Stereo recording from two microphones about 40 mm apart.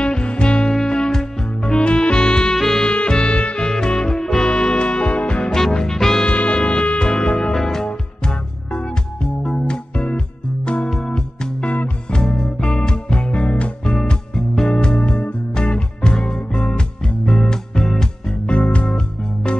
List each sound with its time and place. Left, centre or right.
0.0 s music: left
2.5 s music: centre
2.9 s music: left
5.5 s music: centre
6.2 s music: left
7.5 s music: centre
7.8 s music: left
13.8 s music: centre
18.5 s music: left